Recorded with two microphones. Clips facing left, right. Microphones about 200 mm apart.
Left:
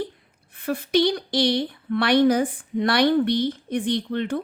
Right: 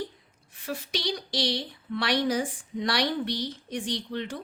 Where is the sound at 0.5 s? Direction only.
55° left (ahead or behind).